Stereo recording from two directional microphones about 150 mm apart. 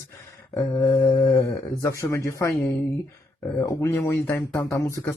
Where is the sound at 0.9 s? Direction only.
20° left (ahead or behind).